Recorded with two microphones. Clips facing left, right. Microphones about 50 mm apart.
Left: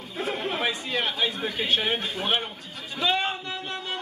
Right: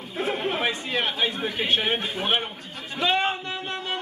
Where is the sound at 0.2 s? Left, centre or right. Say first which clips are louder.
Right 2 dB; centre.